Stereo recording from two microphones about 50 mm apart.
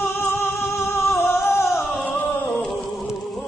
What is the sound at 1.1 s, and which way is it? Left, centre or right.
Music, left.